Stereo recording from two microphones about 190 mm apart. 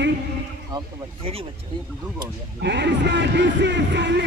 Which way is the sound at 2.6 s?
65° right (ahead or behind).